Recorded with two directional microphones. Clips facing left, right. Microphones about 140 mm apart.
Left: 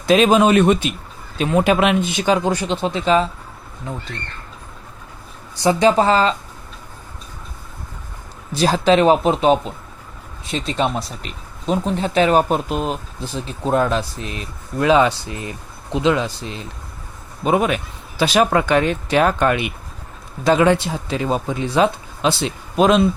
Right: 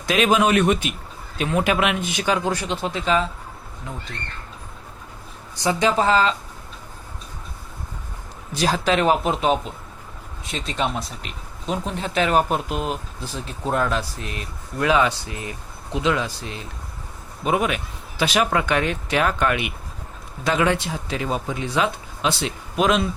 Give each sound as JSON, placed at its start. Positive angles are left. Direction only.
{"t": 0.0, "sound": "speech", "side_deg": 30}
{"t": 5.6, "sound": "speech", "side_deg": 35}
{"t": 8.5, "sound": "speech", "side_deg": 30}
{"t": 17.4, "sound": "speech", "side_deg": 35}